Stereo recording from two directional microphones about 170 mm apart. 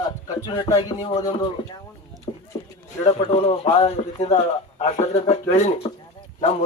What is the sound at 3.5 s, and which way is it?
Speech, 35° left (ahead or behind).